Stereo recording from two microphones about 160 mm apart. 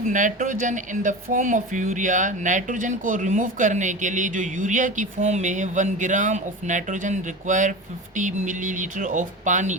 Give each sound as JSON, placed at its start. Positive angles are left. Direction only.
{"t": 0.0, "sound": "speech", "side_deg": -55}